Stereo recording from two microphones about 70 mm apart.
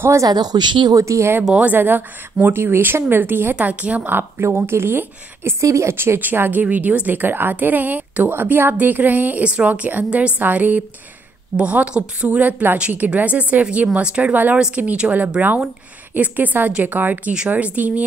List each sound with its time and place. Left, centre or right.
0.2 s speech: right
0.9 s speech: right
1.5 s a woman's voice: right
5.6 s a woman's voice: right